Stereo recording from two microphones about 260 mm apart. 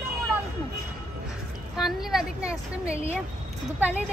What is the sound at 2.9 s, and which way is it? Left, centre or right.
Speech, right.